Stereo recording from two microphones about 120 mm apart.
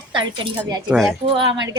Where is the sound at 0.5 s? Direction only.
30° right (ahead or behind).